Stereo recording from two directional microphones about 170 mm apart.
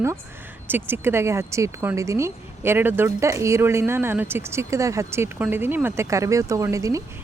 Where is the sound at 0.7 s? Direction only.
15° right (ahead or behind).